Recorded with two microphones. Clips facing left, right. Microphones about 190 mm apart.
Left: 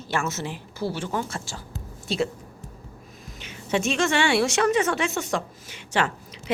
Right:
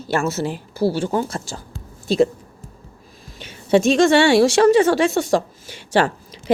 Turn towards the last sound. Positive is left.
turn(degrees=-35)  # may be behind; listen again after turning